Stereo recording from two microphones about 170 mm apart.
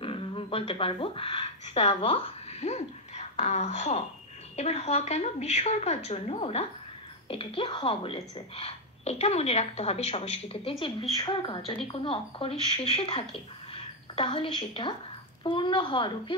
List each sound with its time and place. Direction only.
0.0 s a woman's voice: 30° left (ahead or behind)